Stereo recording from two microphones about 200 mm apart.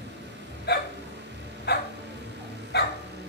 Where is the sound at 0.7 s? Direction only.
55° left (ahead or behind).